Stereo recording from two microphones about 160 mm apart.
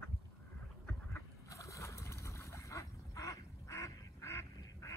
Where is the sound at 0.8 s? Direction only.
20° left (ahead or behind).